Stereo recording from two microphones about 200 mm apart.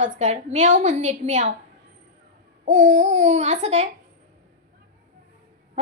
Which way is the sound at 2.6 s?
40° right (ahead or behind).